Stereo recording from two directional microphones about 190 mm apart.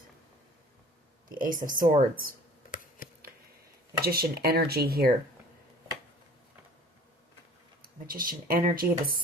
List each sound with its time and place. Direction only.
1.3 s speech: 45° right (ahead or behind)
3.0 s a sound: 45° left (ahead or behind)
4.0 s speech: 55° right (ahead or behind)
8.0 s speech: 50° right (ahead or behind)